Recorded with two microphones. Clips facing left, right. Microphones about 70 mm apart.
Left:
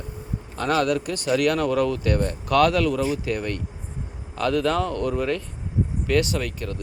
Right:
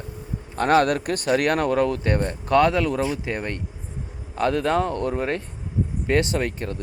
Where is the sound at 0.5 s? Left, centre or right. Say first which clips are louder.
Right 3 dB; right.